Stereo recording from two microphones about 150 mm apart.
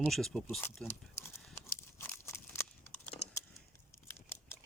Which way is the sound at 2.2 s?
15° left (ahead or behind).